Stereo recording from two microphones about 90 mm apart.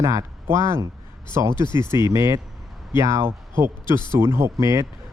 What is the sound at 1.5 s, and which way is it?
Speech, 55° left (ahead or behind).